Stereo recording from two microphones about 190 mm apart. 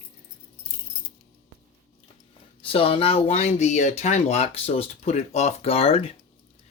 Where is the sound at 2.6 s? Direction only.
30° left (ahead or behind).